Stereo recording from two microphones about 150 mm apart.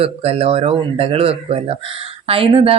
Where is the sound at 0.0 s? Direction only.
40° right (ahead or behind).